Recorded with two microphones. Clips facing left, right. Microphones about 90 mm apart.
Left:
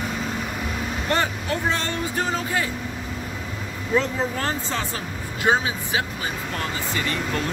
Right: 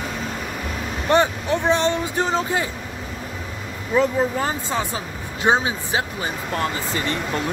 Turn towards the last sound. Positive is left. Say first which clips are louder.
# right 2 dB
turn(degrees=-30)  # may be behind; listen again after turning